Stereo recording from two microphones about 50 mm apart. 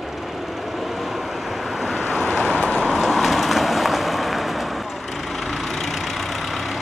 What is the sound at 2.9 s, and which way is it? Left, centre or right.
Vehicle, centre.